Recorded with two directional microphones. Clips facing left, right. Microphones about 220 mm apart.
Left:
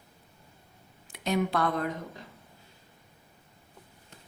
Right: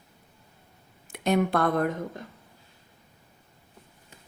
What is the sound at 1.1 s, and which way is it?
A woman's voice, 50° right (ahead or behind).